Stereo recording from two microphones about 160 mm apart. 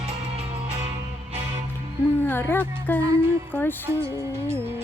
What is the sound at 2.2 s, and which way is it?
Speech, 15° left (ahead or behind).